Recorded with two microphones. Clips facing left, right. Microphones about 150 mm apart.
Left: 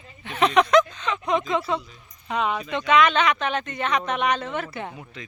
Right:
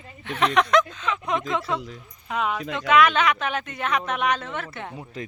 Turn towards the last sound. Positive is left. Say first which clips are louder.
# right 7 dB
turn(degrees=-40)  # may be behind; listen again after turning